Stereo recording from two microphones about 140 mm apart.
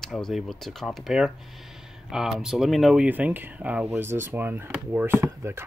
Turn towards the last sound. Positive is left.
turn(degrees=-20)  # may be behind; listen again after turning